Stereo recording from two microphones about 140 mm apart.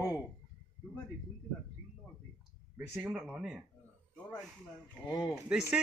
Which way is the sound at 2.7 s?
15° right (ahead or behind).